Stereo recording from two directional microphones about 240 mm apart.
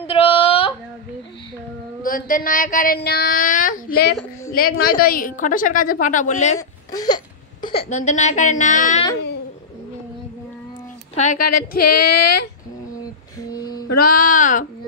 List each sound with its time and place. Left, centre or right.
0.0 s a sound: left
2.0 s a woman's voice: left
6.9 s a sound: centre
7.9 s a woman's voice: left
11.1 s a woman's voice: left
11.8 s speech: left
13.5 s music: centre
13.9 s a woman's voice: left